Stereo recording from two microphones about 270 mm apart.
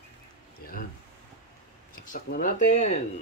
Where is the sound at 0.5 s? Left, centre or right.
Left.